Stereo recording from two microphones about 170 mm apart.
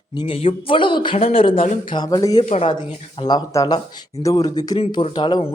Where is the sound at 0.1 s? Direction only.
30° left (ahead or behind).